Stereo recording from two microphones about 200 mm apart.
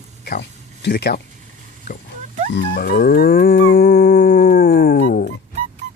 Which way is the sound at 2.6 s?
50° left (ahead or behind).